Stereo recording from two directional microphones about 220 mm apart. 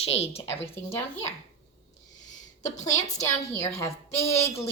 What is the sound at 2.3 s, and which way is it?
Speech, 35° left (ahead or behind).